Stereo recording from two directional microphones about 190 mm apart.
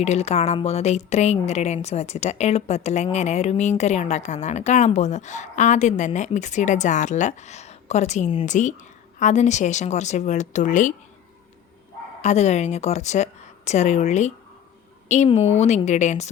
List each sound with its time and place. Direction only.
0.0 s a woman's voice: 35° left (ahead or behind)
12.2 s a woman's voice: 35° left (ahead or behind)